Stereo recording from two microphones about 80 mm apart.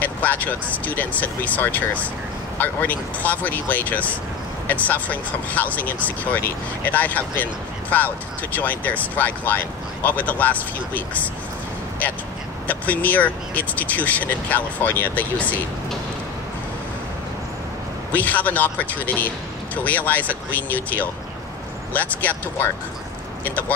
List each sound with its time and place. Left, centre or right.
0.0 s speech: left
12.6 s speech: centre
18.1 s speech: centre